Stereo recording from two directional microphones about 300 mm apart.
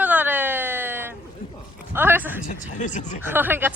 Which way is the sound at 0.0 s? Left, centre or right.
Centre.